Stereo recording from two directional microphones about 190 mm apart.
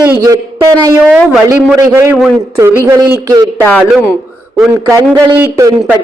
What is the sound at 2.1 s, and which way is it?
Speech, centre (ahead or behind).